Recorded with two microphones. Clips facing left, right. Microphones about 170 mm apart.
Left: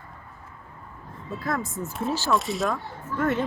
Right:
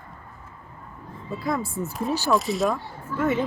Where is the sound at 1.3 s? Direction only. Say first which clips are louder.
Right 2 dB; centre (ahead or behind).